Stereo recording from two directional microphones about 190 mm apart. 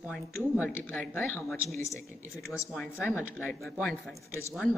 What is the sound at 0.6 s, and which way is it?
Speech, 10° left (ahead or behind).